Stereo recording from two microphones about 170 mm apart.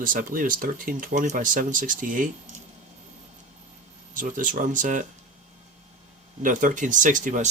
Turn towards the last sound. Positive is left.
turn(degrees=-50)  # may be behind; listen again after turning